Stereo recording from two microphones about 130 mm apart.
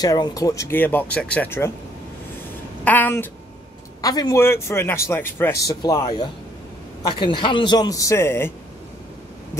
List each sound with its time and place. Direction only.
0.0 s speech: 30° left (ahead or behind)
2.8 s a sound: 15° left (ahead or behind)
4.0 s speech: 30° left (ahead or behind)
5.8 s a man's voice: 30° left (ahead or behind)